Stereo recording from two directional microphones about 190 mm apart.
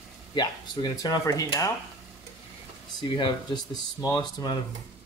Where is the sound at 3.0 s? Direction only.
25° left (ahead or behind).